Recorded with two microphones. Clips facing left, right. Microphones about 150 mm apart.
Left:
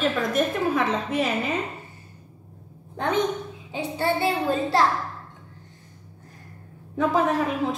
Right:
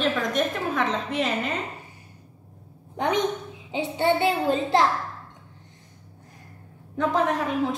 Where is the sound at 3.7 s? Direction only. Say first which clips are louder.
Right 2 dB; 20° right (ahead or behind).